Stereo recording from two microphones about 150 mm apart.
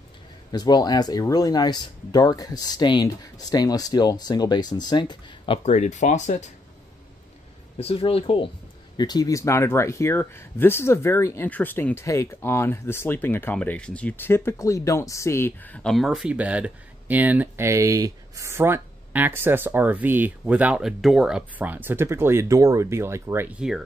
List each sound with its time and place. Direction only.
0.5 s speech: 25° left (ahead or behind)
5.7 s speech: 50° left (ahead or behind)
7.8 s speech: 40° left (ahead or behind)
8.9 s speech: 25° left (ahead or behind); by 23.8 s 5° right (ahead or behind)